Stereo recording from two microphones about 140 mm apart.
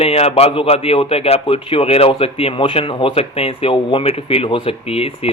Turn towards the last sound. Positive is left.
turn(degrees=45)  # may be behind; listen again after turning